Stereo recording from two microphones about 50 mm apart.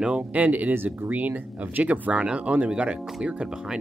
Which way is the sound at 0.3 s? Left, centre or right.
Right.